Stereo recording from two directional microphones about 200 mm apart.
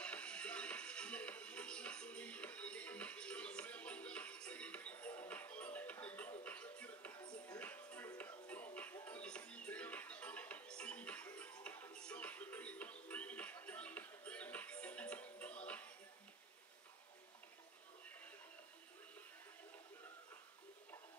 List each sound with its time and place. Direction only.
0.0 s music: 5° left (ahead or behind)
7.2 s music: 20° left (ahead or behind)
7.5 s music: 5° left (ahead or behind)